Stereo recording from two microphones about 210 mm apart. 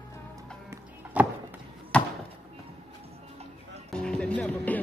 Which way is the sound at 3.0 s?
30° right (ahead or behind).